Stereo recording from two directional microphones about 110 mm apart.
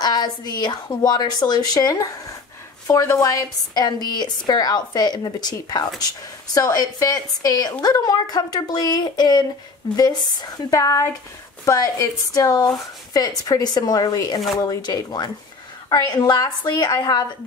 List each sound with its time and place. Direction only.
0.0 s a woman's voice: 40° left (ahead or behind)